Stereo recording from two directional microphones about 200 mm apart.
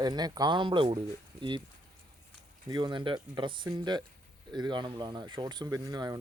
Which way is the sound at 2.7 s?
20° right (ahead or behind).